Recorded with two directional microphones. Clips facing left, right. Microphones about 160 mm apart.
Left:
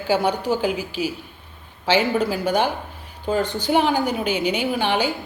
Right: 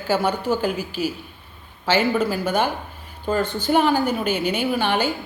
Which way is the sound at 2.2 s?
15° left (ahead or behind).